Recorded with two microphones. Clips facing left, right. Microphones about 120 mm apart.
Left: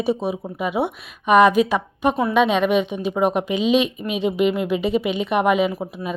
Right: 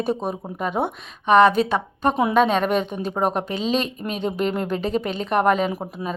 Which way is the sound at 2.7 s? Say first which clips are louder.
Left 3 dB; 5° left (ahead or behind).